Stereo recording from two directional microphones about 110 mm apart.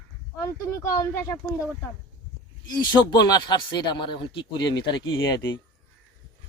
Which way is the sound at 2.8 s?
45° left (ahead or behind).